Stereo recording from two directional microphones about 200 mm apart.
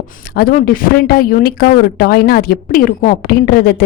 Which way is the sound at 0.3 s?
50° left (ahead or behind).